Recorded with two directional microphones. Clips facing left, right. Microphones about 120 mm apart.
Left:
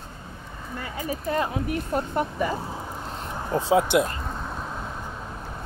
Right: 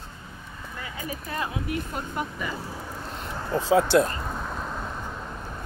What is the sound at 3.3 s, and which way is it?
Speech, 20° left (ahead or behind).